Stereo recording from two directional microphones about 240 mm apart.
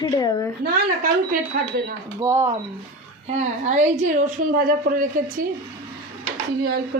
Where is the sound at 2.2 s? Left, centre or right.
Centre.